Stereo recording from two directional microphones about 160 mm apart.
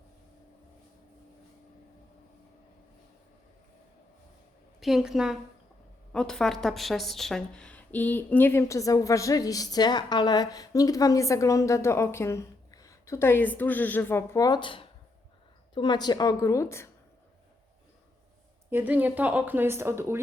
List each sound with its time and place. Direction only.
4.8 s a woman's voice: centre (ahead or behind); by 16.9 s 20° left (ahead or behind)
18.7 s speech: 10° right (ahead or behind)